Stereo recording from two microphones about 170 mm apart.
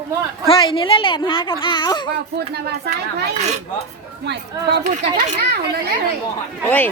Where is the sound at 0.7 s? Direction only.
30° left (ahead or behind).